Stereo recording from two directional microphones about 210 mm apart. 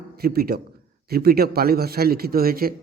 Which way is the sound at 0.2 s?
45° right (ahead or behind).